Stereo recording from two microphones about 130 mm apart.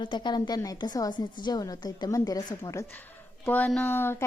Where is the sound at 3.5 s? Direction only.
10° left (ahead or behind).